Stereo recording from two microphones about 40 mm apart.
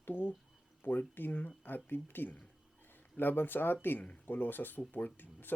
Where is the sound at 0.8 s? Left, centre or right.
Left.